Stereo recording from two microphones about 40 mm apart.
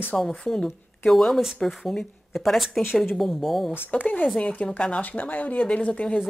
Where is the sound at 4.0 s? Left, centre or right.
Left.